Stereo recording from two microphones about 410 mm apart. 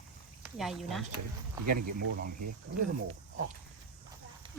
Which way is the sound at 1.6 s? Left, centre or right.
Right.